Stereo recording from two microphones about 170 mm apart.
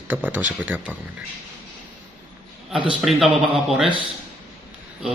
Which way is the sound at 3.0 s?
Centre (ahead or behind).